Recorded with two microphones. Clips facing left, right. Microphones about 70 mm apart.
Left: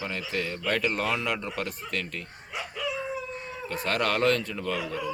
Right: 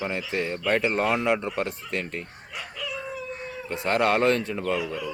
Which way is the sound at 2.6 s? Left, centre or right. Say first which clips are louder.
Left 3 dB; centre.